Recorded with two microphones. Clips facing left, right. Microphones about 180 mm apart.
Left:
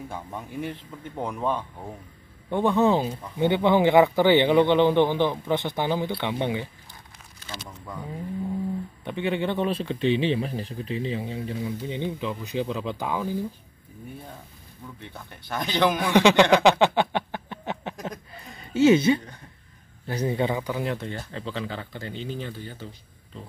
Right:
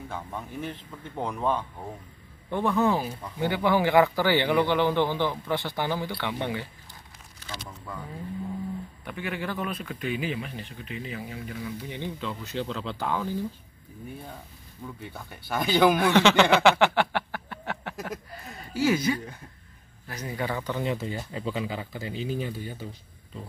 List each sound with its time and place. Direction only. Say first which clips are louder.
0.1 s speech: left 1 dB; 10° left (ahead or behind)
2.5 s a man's voice: left 3 dB; 20° left (ahead or behind)
7.8 s speech: left 3 dB; 15° left (ahead or behind)
9.0 s a man's voice: left 7 dB; 25° left (ahead or behind)
15.0 s speech: right 1 dB; 5° right (ahead or behind)
16.0 s a sound: left 2 dB; 15° left (ahead or behind)
18.7 s a man's voice: left 7 dB; 25° left (ahead or behind)
20.6 s speech: even; 5° left (ahead or behind); by 22.8 s 10° right (ahead or behind)